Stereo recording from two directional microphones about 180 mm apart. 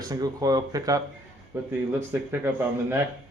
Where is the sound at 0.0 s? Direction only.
20° right (ahead or behind).